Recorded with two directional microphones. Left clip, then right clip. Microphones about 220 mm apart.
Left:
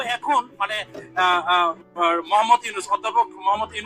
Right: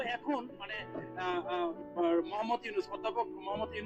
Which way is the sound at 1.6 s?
40° left (ahead or behind).